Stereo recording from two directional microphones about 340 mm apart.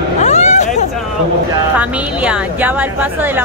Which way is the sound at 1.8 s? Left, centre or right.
Centre.